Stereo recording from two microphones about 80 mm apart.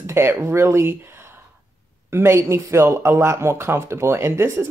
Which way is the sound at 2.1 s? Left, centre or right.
Right.